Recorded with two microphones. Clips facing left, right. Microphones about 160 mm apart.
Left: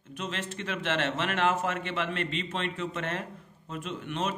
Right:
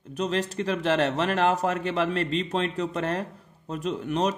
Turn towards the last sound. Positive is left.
turn(degrees=-35)  # may be behind; listen again after turning